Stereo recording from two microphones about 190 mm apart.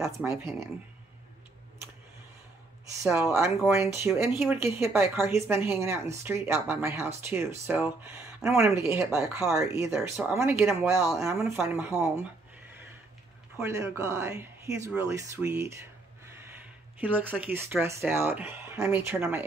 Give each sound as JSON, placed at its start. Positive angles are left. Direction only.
{"t": 0.0, "sound": "speech", "side_deg": -10}
{"t": 3.0, "sound": "speech", "side_deg": -15}
{"t": 13.6, "sound": "speech", "side_deg": -15}
{"t": 16.3, "sound": "a sound", "side_deg": -15}
{"t": 17.0, "sound": "speech", "side_deg": -10}